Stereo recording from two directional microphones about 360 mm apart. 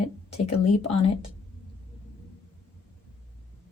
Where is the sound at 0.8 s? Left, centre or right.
Centre.